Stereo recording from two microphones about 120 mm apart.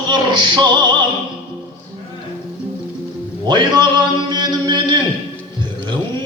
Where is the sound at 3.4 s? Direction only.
35° right (ahead or behind).